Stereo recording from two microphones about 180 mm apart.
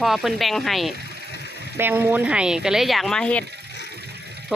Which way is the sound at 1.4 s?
65° left (ahead or behind).